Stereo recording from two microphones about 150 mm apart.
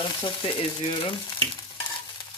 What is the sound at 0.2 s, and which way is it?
Speech, 35° left (ahead or behind).